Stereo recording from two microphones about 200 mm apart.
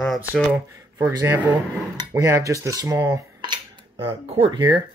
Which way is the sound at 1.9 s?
15° right (ahead or behind).